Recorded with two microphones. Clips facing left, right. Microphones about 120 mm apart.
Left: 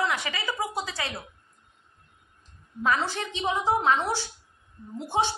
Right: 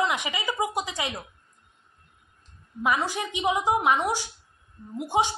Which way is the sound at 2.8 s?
10° right (ahead or behind).